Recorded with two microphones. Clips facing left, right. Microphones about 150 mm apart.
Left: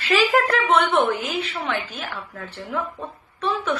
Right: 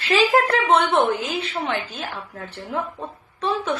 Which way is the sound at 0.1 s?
25° right (ahead or behind).